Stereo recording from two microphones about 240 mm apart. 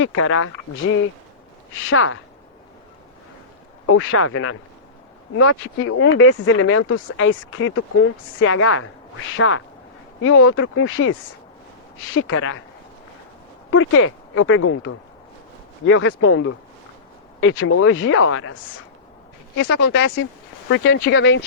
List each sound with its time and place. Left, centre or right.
0.0 s speech: left
3.9 s speech: left
13.7 s speech: left
19.6 s speech: left